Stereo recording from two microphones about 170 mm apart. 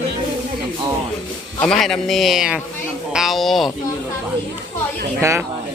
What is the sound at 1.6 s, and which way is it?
A man's voice, 5° left (ahead or behind).